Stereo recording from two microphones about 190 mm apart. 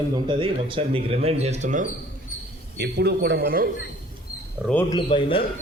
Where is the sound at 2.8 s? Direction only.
60° right (ahead or behind).